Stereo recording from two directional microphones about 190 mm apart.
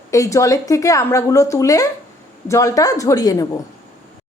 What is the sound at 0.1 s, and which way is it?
A woman's voice, 15° left (ahead or behind).